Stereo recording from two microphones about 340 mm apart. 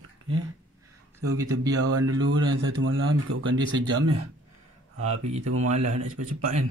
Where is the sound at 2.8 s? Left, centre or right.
Right.